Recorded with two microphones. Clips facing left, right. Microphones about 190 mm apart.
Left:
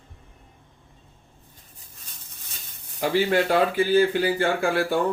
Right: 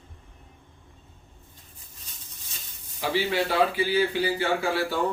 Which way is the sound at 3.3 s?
45° left (ahead or behind).